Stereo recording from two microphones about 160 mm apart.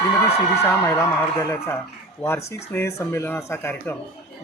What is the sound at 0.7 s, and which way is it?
Speech, 15° left (ahead or behind).